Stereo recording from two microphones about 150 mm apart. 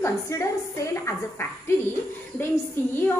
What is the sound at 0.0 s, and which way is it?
Speech, 20° left (ahead or behind).